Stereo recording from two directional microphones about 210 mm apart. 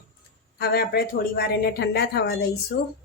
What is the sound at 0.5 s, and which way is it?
Speech, 50° left (ahead or behind).